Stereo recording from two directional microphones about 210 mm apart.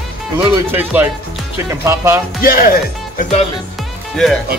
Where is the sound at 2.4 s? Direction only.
45° left (ahead or behind).